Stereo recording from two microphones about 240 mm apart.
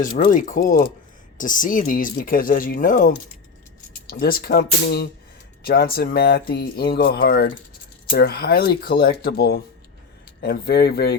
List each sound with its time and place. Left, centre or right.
0.3 s speech: left